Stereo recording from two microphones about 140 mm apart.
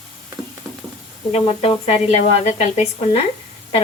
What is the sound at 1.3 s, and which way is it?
A woman's voice, 45° left (ahead or behind).